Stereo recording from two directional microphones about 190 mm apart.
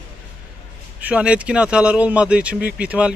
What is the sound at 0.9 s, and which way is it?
A man's voice, 5° right (ahead or behind).